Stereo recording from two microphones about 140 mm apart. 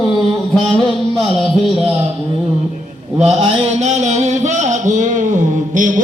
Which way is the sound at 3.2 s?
45° right (ahead or behind).